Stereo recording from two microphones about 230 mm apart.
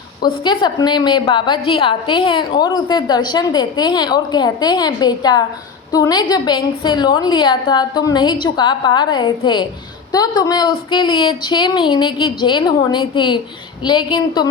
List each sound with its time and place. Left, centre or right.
0.4 s a woman's voice: centre